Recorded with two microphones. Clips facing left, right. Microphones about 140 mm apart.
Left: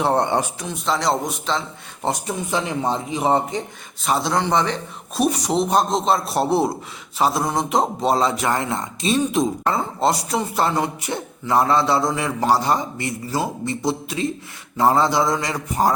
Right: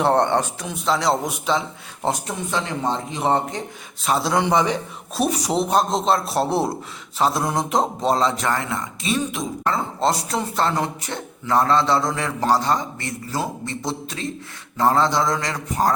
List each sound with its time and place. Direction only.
0.0 s a man's voice: 5° left (ahead or behind)
0.6 s speech: centre (ahead or behind)
2.5 s a man's voice: 15° left (ahead or behind)
8.5 s speech: 25° left (ahead or behind)
9.7 s a man's voice: 5° left (ahead or behind)